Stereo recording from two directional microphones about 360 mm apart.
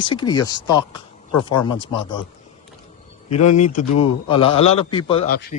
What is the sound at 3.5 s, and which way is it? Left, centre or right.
A man's voice, centre.